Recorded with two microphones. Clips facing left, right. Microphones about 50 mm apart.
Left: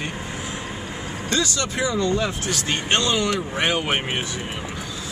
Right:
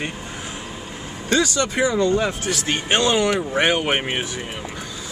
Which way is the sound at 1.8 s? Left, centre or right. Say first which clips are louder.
Right 3 dB; centre.